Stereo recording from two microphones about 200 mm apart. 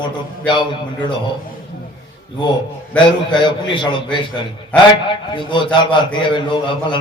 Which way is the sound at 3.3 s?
25° left (ahead or behind).